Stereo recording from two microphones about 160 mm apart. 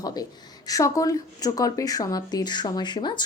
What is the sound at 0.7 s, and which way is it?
Speech, 20° left (ahead or behind).